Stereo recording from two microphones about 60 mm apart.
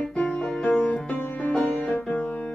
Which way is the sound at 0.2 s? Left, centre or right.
Centre.